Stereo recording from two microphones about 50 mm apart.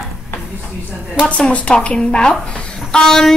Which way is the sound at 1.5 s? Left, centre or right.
Left.